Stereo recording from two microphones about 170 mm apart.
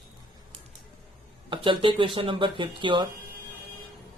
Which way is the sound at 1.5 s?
30° right (ahead or behind).